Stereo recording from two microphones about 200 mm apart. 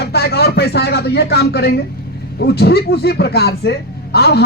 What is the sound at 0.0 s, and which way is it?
A man's voice, 55° left (ahead or behind).